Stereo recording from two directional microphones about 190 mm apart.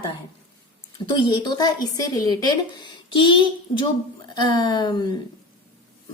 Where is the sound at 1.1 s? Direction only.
25° left (ahead or behind).